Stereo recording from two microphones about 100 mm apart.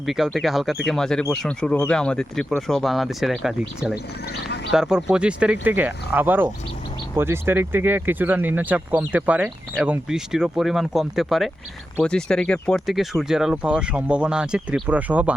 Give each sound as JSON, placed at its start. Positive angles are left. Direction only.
{"t": 0.0, "sound": "speech", "side_deg": 0}
{"t": 12.8, "sound": "speech", "side_deg": 0}